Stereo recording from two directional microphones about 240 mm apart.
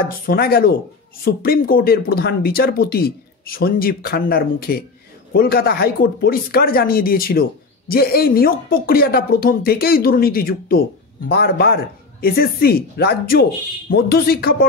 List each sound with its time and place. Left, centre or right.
0.3 s a woman's voice: left